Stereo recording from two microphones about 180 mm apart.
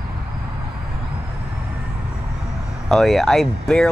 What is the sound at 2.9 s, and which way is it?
Speech, centre (ahead or behind).